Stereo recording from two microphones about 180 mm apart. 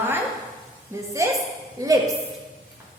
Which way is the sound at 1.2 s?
15° right (ahead or behind).